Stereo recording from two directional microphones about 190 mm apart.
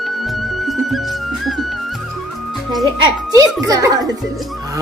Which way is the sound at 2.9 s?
20° right (ahead or behind).